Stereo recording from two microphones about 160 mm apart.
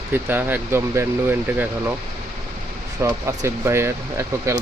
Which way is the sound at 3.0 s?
15° right (ahead or behind).